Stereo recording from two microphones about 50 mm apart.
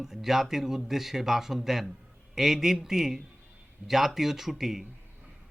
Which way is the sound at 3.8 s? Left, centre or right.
Right.